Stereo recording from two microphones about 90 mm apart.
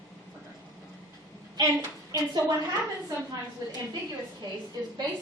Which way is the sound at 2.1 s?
50° right (ahead or behind).